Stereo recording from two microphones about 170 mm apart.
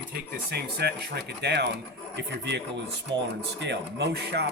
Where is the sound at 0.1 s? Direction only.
70° right (ahead or behind).